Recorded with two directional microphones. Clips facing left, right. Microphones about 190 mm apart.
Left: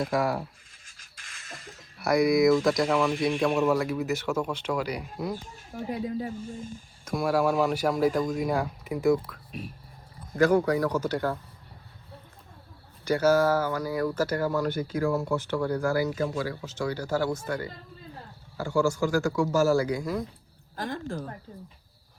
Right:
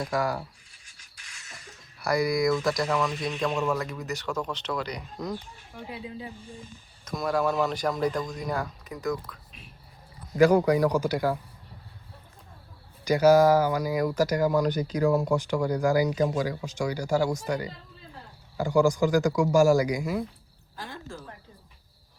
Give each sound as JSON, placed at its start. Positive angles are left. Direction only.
{"t": 0.0, "sound": "speech", "side_deg": 0}
{"t": 0.7, "sound": "music", "side_deg": 50}
{"t": 2.0, "sound": "speech", "side_deg": 0}
{"t": 5.7, "sound": "speech", "side_deg": 45}
{"t": 7.0, "sound": "speech", "side_deg": 5}
{"t": 10.3, "sound": "speech", "side_deg": -15}
{"t": 13.1, "sound": "speech", "side_deg": -15}
{"t": 20.7, "sound": "speech", "side_deg": 45}